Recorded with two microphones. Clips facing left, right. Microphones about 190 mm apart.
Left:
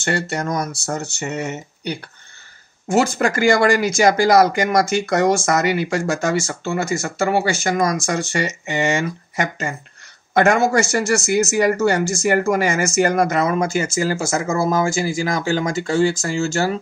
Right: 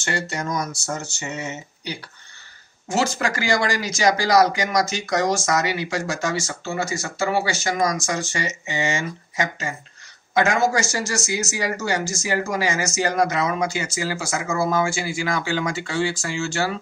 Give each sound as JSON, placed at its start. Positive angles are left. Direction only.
{"t": 0.0, "sound": "speech", "side_deg": 60}